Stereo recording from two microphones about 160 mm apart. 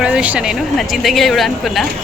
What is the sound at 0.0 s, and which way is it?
Speech, 5° right (ahead or behind).